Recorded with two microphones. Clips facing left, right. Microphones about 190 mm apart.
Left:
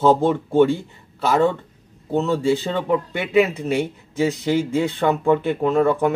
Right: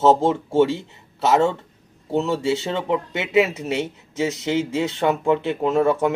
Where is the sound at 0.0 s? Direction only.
25° right (ahead or behind).